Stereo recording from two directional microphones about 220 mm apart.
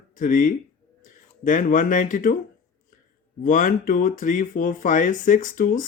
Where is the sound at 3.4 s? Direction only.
40° left (ahead or behind).